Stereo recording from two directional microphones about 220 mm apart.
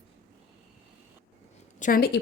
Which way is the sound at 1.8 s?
40° left (ahead or behind).